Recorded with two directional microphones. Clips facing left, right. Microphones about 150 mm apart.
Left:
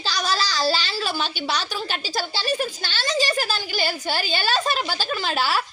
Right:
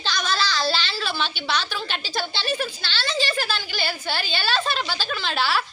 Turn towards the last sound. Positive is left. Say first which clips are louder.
# left 1 dB
turn(degrees=40)  # may be behind; listen again after turning